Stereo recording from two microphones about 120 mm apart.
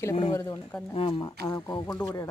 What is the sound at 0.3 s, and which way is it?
Speech, 30° left (ahead or behind).